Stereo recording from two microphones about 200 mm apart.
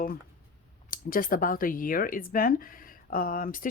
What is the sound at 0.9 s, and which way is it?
Speech, 45° left (ahead or behind).